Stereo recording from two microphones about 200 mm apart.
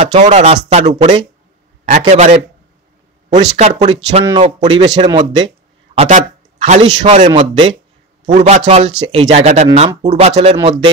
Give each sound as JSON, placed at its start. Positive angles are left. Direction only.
{"t": 0.0, "sound": "a man's voice", "side_deg": -35}
{"t": 3.5, "sound": "a man's voice", "side_deg": -35}
{"t": 4.4, "sound": "speech", "side_deg": -25}
{"t": 5.9, "sound": "a man's voice", "side_deg": -35}